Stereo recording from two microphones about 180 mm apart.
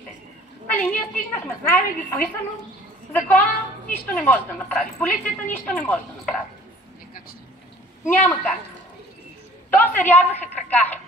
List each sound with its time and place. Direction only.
0.7 s a woman's voice: 10° left (ahead or behind)
8.1 s a woman's voice: 10° left (ahead or behind)
9.7 s a woman's voice: 10° left (ahead or behind)